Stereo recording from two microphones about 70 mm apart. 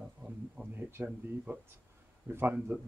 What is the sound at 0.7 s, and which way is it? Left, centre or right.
Speech, right.